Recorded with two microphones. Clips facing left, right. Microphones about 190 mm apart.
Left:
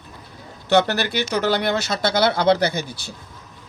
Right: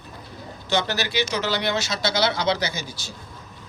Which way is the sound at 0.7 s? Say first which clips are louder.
Left 6 dB; 60° left (ahead or behind).